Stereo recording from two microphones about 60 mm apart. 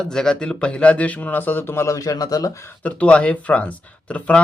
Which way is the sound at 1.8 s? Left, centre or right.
Left.